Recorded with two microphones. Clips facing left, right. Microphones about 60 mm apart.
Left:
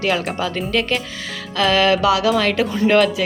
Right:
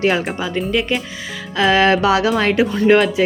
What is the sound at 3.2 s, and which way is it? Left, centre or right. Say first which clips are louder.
Speech: right 5 dB; right.